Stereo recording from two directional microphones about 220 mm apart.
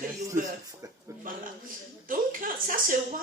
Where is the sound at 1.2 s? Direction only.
40° right (ahead or behind).